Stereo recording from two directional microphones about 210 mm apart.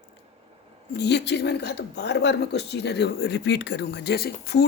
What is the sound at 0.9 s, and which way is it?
A woman's voice, 55° left (ahead or behind).